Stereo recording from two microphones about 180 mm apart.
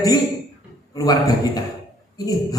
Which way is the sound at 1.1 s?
20° left (ahead or behind).